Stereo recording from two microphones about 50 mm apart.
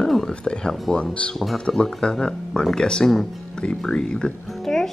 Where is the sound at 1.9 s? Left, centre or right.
Centre.